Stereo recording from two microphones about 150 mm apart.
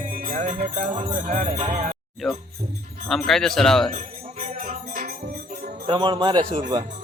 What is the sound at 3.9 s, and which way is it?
Music, 60° right (ahead or behind).